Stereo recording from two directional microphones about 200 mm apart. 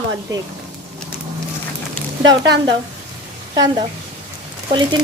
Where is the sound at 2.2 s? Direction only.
60° right (ahead or behind).